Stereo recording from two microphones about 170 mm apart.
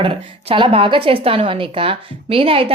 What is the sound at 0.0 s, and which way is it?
A woman's voice, 30° right (ahead or behind).